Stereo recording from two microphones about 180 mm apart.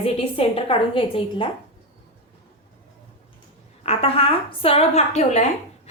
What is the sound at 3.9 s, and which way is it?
A woman's voice, 35° left (ahead or behind).